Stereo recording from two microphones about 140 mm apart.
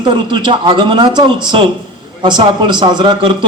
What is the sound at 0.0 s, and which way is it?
A man's voice, 35° right (ahead or behind).